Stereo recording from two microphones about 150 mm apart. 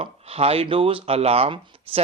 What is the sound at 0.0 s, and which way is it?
Speech, 40° right (ahead or behind).